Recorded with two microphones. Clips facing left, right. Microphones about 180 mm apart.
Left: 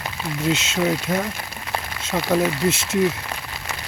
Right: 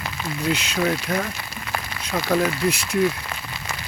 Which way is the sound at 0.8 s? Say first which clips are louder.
Left 1 dB; 5° left (ahead or behind).